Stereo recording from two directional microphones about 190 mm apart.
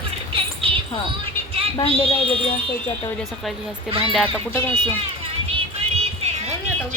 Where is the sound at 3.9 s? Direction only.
30° right (ahead or behind).